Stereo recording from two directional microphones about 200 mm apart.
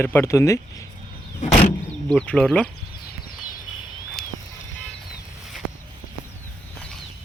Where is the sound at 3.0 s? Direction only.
45° left (ahead or behind).